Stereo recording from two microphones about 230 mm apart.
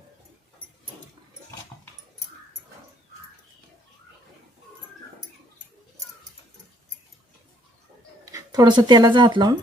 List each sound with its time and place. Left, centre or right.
8.2 s speech: centre